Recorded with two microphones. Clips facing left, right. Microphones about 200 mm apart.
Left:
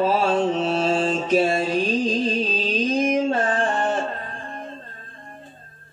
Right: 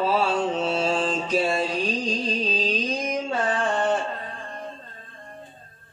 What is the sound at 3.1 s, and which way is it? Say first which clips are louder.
Music: left 5 dB; 50° left (ahead or behind).